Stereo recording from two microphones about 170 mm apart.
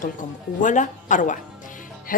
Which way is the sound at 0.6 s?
45° left (ahead or behind).